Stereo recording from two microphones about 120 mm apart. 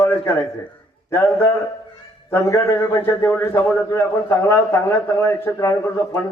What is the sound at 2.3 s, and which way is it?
A man's voice, 20° left (ahead or behind).